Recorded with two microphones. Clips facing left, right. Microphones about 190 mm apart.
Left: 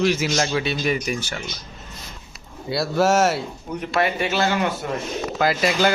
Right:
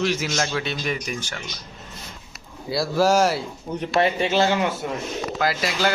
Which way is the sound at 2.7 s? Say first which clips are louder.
Even; centre (ahead or behind).